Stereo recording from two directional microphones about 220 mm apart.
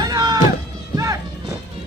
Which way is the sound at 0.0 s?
15° right (ahead or behind).